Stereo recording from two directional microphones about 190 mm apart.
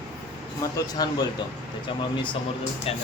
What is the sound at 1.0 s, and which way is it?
Speech, 20° left (ahead or behind).